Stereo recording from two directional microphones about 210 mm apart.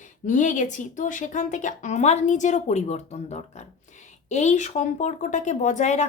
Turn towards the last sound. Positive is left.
turn(degrees=35)  # may be behind; listen again after turning